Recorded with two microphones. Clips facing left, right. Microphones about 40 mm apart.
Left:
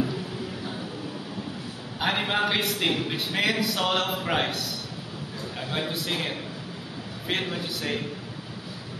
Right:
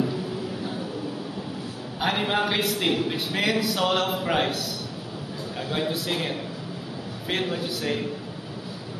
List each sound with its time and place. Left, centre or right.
2.0 s a man's voice: centre